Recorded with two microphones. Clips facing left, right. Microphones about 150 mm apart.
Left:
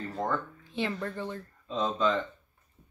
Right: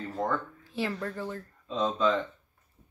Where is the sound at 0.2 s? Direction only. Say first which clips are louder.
Right 1 dB; centre (ahead or behind).